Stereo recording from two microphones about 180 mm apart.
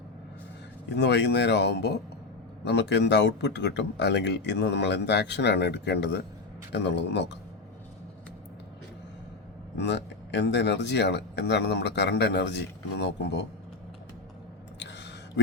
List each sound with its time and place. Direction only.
0.9 s speech: 70° left (ahead or behind)
9.7 s speech: 75° left (ahead or behind)
14.8 s a sound: 75° left (ahead or behind)